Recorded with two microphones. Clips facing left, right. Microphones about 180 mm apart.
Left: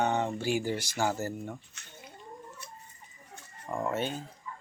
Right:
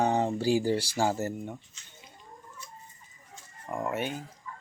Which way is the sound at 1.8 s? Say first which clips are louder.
Left 4 dB; 65° left (ahead or behind).